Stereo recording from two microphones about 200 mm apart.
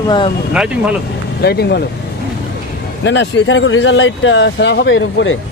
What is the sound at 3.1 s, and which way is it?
Speech, 65° left (ahead or behind).